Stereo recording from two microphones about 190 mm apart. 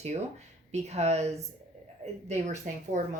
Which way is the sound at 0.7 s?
35° right (ahead or behind).